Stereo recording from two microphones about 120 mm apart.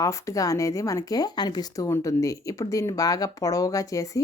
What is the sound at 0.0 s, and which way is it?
Speech, 25° left (ahead or behind).